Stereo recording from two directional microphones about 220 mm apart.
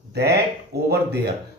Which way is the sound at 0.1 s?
50° right (ahead or behind).